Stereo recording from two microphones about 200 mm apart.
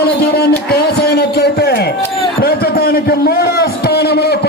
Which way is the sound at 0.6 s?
50° left (ahead or behind).